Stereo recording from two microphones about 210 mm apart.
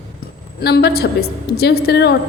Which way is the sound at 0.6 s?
50° left (ahead or behind).